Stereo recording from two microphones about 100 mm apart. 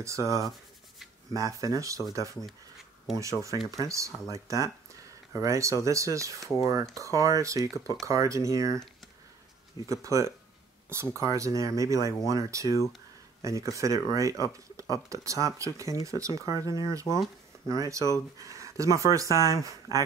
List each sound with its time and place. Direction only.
0.0 s speech: 30° right (ahead or behind)
3.2 s speech: 30° right (ahead or behind)
9.8 s speech: 30° right (ahead or behind)
17.1 s speech: 5° left (ahead or behind)
17.6 s speech: 35° right (ahead or behind)